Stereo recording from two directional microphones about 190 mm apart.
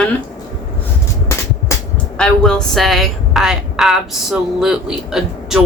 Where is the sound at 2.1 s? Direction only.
5° left (ahead or behind).